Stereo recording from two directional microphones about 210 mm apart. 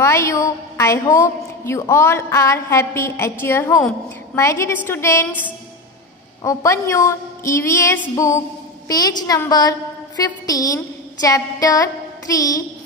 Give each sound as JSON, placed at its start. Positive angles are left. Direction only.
{"t": 0.0, "sound": "a woman's voice", "side_deg": 15}
{"t": 6.4, "sound": "a woman's voice", "side_deg": 15}